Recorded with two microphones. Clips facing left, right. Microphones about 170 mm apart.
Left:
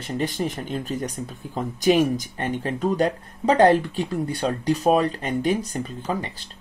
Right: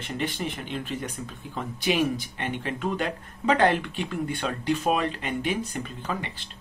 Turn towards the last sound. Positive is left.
turn(degrees=40)  # may be behind; listen again after turning